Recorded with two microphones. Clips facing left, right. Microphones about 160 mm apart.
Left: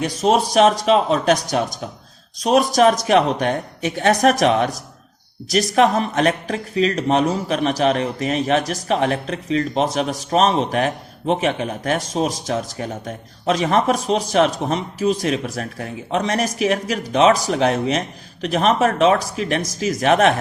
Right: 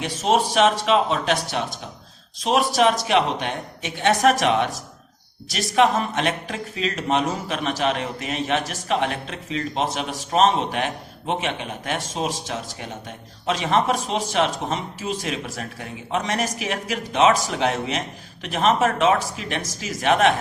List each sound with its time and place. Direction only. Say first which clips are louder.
0.0 s speech: left 3 dB; 40° left (ahead or behind)